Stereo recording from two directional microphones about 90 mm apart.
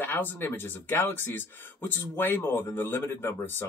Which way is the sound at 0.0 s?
25° left (ahead or behind).